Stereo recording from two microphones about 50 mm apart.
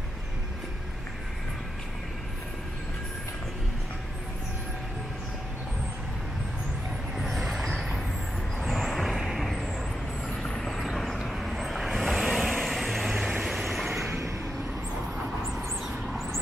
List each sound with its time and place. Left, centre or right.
7.2 s vehicle: centre
14.0 s vehicle: right